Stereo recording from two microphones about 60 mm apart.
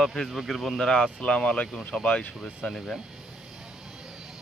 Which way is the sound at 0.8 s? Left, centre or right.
Centre.